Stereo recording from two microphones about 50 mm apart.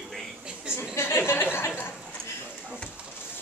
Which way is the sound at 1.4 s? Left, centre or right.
Left.